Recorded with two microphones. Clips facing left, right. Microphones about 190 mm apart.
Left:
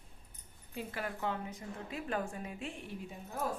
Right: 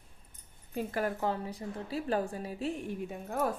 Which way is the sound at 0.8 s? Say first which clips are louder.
Right 7 dB; 45° right (ahead or behind).